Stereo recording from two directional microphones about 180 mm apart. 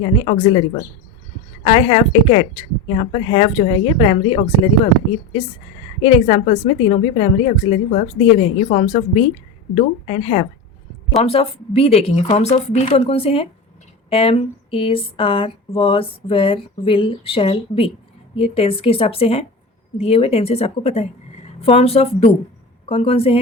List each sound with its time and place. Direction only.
0.2 s speech: 30° left (ahead or behind)
1.6 s speech: 35° left (ahead or behind)
6.0 s speech: 35° left (ahead or behind)